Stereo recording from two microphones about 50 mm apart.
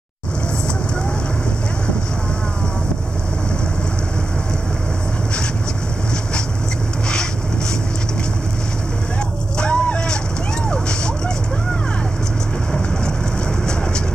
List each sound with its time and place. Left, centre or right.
9.6 s vehicle: left